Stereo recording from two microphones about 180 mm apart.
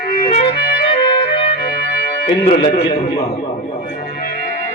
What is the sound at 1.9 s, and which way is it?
Music, 60° left (ahead or behind).